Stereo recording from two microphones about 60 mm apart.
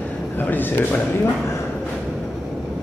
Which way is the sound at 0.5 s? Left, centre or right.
Left.